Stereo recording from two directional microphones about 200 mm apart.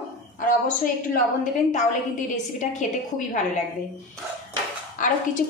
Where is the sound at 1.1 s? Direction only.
40° left (ahead or behind).